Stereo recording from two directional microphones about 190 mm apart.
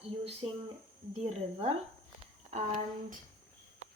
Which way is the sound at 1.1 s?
35° right (ahead or behind).